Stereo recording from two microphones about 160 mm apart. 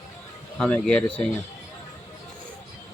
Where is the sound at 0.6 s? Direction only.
5° left (ahead or behind).